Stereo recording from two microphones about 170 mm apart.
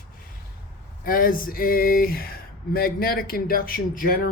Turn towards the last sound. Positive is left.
turn(degrees=55)  # may be behind; listen again after turning